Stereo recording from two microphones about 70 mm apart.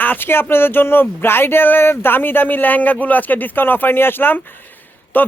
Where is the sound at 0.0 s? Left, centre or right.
Left.